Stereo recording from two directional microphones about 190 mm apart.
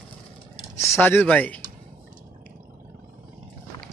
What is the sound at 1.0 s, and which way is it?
Speech, 10° left (ahead or behind).